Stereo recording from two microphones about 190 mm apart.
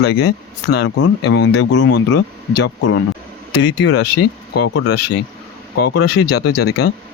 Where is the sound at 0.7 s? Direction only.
60° left (ahead or behind).